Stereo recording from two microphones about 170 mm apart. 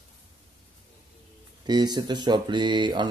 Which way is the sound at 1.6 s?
25° right (ahead or behind).